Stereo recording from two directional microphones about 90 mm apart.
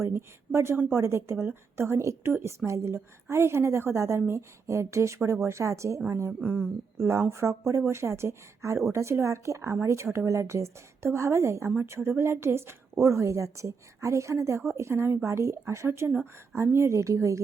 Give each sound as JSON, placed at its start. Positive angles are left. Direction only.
{"t": 0.0, "sound": "a woman's voice", "side_deg": -30}